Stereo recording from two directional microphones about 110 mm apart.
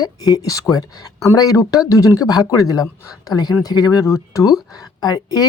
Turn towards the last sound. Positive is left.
turn(degrees=35)  # may be behind; listen again after turning